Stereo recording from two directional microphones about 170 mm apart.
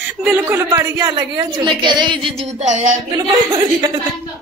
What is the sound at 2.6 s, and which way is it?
Speech, 45° right (ahead or behind).